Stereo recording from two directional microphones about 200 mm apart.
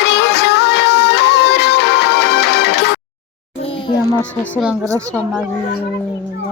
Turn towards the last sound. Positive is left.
turn(degrees=-5)  # may be behind; listen again after turning